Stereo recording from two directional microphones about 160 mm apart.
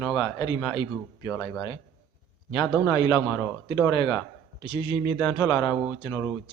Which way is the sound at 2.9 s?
30° left (ahead or behind).